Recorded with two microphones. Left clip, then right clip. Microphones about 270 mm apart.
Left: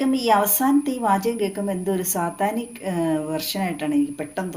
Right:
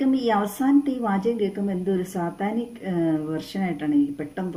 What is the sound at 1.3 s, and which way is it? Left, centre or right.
Speech, left.